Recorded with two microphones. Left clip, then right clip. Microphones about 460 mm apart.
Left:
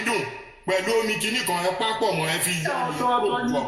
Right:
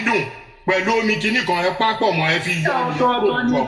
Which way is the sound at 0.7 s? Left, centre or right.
Left.